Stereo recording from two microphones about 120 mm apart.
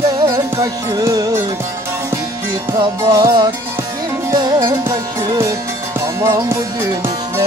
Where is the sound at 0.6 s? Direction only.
30° right (ahead or behind).